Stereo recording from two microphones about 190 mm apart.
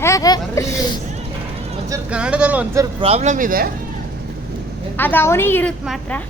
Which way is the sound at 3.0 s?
35° right (ahead or behind).